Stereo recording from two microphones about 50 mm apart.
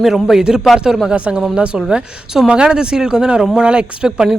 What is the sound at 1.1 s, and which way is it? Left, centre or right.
Speech, right.